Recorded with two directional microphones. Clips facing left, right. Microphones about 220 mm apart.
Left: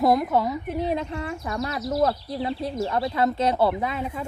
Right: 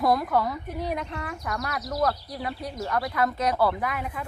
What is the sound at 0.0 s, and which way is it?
Speech, 25° left (ahead or behind).